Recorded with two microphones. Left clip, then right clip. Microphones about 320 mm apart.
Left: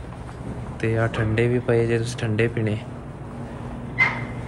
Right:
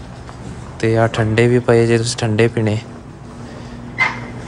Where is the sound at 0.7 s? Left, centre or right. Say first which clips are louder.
Right 9 dB; centre.